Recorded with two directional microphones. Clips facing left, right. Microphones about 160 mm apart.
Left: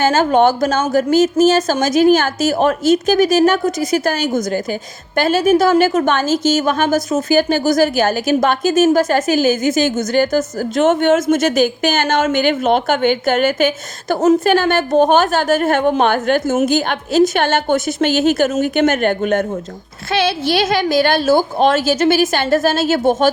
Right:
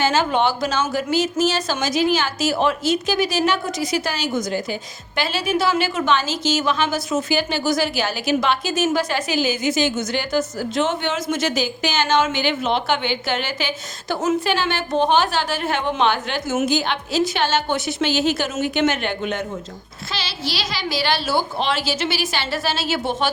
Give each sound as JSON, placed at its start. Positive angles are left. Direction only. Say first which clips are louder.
{"t": 0.0, "sound": "a woman's voice", "louder": "left 6 dB", "side_deg": 50}